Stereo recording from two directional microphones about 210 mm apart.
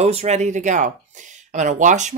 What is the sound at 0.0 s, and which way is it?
Speech, 30° right (ahead or behind).